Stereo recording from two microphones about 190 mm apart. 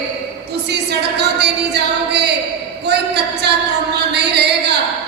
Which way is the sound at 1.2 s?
60° right (ahead or behind).